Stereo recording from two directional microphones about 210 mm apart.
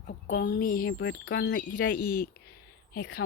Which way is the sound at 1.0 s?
60° left (ahead or behind).